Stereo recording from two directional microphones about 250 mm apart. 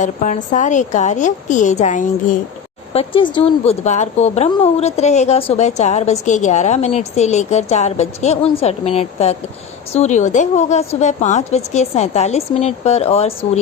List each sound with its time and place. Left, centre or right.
0.0 s a woman's voice: left